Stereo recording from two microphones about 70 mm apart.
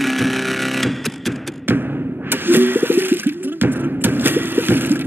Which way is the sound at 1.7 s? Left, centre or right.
Right.